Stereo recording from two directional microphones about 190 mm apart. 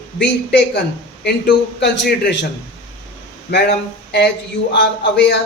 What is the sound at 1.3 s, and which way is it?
Speech, 60° left (ahead or behind).